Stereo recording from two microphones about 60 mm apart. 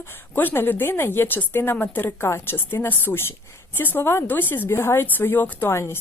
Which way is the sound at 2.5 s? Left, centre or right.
Left.